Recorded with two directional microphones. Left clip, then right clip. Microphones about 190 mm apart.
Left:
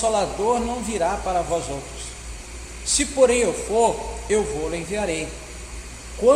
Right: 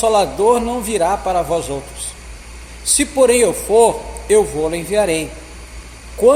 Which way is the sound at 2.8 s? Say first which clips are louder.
Right 4 dB; 35° right (ahead or behind).